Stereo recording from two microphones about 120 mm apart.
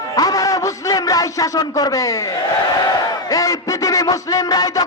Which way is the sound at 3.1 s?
30° left (ahead or behind).